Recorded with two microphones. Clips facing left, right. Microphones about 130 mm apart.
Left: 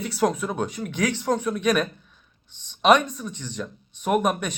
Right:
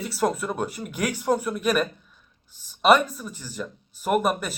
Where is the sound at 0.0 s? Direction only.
Centre (ahead or behind).